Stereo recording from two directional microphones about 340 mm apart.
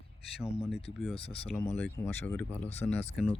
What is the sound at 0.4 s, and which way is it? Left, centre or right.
Speech, centre.